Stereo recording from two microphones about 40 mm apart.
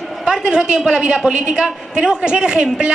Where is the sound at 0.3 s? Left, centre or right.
Centre.